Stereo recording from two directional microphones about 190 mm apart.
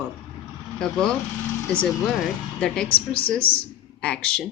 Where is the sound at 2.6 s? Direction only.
5° left (ahead or behind).